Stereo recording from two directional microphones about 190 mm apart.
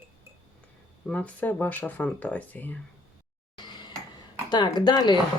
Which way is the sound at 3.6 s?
25° left (ahead or behind).